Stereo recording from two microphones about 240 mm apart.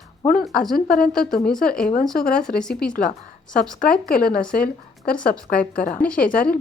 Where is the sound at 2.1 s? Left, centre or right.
Left.